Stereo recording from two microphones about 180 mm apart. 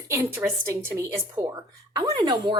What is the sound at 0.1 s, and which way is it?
A woman's voice, 10° right (ahead or behind).